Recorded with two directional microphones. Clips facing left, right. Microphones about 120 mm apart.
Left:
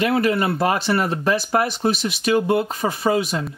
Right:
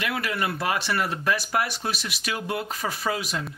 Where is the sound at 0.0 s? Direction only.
30° left (ahead or behind).